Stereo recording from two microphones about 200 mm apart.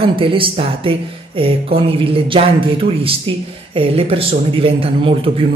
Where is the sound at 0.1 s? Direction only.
25° right (ahead or behind).